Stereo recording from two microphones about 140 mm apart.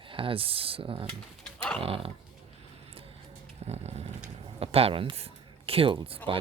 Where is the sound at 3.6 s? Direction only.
50° right (ahead or behind).